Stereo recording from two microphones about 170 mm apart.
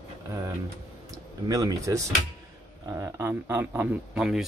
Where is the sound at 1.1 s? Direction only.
20° right (ahead or behind); by 4.4 s 5° right (ahead or behind).